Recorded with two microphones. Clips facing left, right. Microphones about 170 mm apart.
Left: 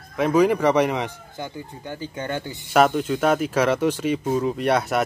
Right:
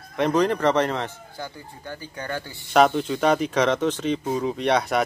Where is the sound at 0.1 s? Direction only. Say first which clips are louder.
Left 3 dB; 5° left (ahead or behind).